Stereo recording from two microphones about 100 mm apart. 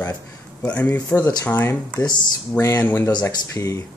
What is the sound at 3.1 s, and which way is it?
Speech, 45° left (ahead or behind).